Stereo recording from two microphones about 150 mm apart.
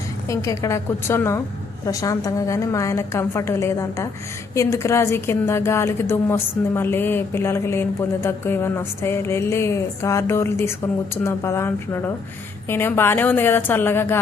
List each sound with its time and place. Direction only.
0.3 s a woman's voice: 20° left (ahead or behind)